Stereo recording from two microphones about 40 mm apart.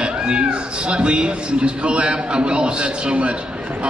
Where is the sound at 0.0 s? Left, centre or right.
Right.